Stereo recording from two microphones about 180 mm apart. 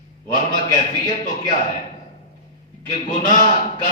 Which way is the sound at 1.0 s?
45° left (ahead or behind).